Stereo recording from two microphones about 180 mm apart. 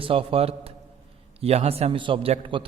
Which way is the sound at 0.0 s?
30° right (ahead or behind).